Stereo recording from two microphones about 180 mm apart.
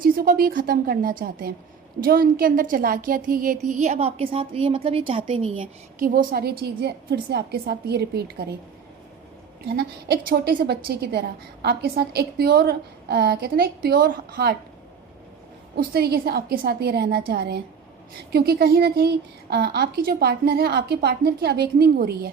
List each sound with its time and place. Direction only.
0.0 s a woman's voice: 55° right (ahead or behind)
3.7 s a woman's voice: 40° right (ahead or behind)
6.0 s a woman's voice: 55° right (ahead or behind)
9.6 s a woman's voice: 60° right (ahead or behind)
15.7 s a woman's voice: 60° right (ahead or behind)